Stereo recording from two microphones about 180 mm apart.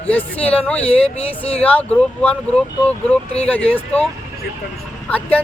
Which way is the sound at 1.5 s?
10° left (ahead or behind).